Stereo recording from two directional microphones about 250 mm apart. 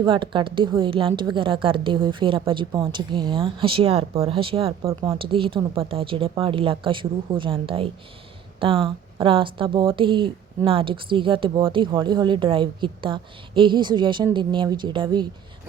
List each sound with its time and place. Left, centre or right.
0.0 s speech: centre